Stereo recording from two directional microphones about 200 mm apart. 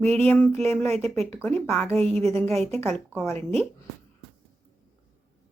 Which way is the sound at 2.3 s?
10° left (ahead or behind).